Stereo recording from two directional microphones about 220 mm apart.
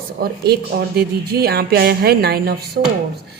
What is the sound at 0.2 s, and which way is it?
Speech, 45° right (ahead or behind).